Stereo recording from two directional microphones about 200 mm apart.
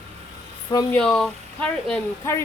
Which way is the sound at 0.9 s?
5° left (ahead or behind).